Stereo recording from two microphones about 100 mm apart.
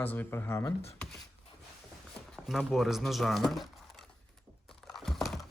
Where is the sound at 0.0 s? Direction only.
20° left (ahead or behind).